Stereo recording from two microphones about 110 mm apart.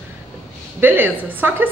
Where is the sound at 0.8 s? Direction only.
15° right (ahead or behind).